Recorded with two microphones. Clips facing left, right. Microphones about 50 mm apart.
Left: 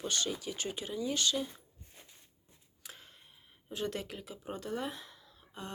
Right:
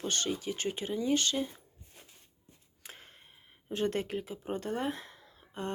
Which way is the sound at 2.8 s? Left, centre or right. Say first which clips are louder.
Right 2 dB; right.